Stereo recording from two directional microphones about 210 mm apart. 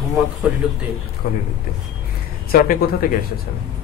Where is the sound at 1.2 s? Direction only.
45° left (ahead or behind).